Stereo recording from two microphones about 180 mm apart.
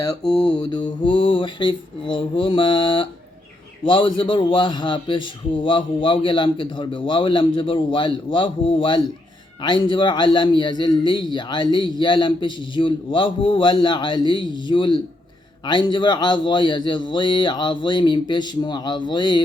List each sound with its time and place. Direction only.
0.7 s a man's voice: 25° left (ahead or behind)